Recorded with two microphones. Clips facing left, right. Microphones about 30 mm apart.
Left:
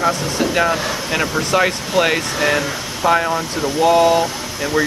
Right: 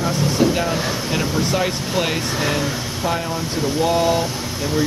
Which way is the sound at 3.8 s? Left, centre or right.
Centre.